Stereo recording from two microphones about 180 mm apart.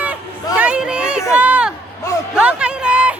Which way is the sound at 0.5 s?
5° right (ahead or behind).